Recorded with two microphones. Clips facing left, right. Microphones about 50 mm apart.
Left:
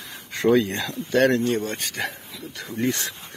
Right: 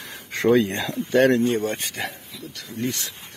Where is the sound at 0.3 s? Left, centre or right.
Right.